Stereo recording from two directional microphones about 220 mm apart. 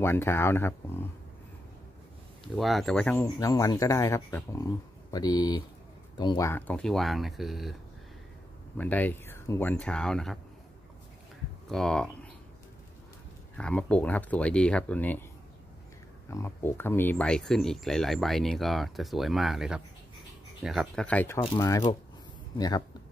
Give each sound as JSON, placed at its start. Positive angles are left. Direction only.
{"t": 0.0, "sound": "speech", "side_deg": 10}
{"t": 2.4, "sound": "speech", "side_deg": 0}
{"t": 8.7, "sound": "speech", "side_deg": 5}
{"t": 11.7, "sound": "speech", "side_deg": 5}
{"t": 13.6, "sound": "speech", "side_deg": 5}
{"t": 16.3, "sound": "speech", "side_deg": 10}